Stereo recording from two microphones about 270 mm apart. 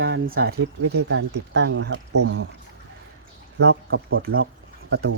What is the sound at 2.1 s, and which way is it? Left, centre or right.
Speech, right.